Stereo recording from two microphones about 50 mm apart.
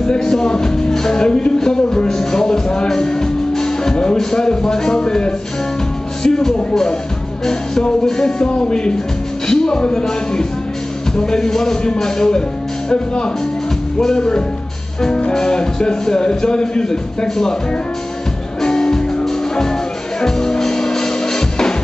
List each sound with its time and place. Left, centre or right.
0.0 s music: centre
6.2 s speech: centre
18.6 s music: centre